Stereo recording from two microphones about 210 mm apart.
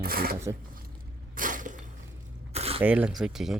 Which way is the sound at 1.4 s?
40° right (ahead or behind).